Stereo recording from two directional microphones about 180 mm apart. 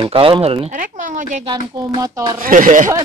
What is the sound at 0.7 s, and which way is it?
Speech, 45° right (ahead or behind).